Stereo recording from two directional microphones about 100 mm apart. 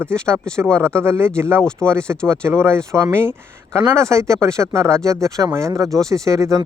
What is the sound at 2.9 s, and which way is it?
Speech, 25° right (ahead or behind).